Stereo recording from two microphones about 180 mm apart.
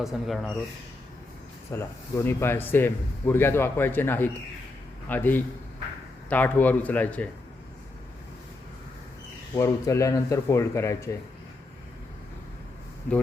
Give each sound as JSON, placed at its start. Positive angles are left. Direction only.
{"t": 0.0, "sound": "speech", "side_deg": 0}
{"t": 1.7, "sound": "a man's voice", "side_deg": 15}
{"t": 9.6, "sound": "a man's voice", "side_deg": 15}